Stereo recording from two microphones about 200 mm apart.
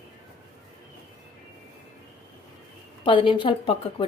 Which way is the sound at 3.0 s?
25° left (ahead or behind).